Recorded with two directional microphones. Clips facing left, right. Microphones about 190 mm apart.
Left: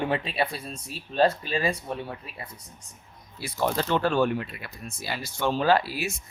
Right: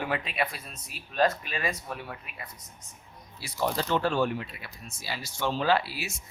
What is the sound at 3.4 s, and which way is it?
Speech, 60° left (ahead or behind).